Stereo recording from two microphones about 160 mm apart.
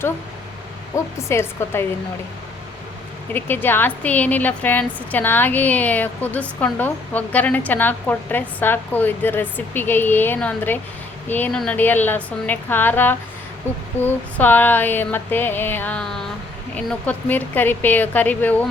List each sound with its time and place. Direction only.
0.9 s a woman's voice: 15° left (ahead or behind)
3.3 s a woman's voice: 15° left (ahead or behind)